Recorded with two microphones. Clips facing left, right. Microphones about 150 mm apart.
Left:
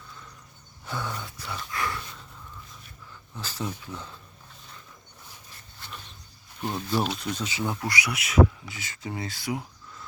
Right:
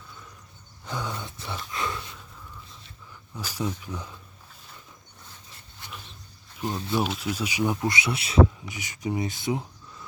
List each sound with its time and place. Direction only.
0.9 s a sound: 15° right (ahead or behind)
1.7 s dog: 20° right (ahead or behind)
3.3 s speech: 10° right (ahead or behind)
6.6 s speech: centre (ahead or behind); by 8.4 s 30° right (ahead or behind)
8.6 s speech: 15° right (ahead or behind)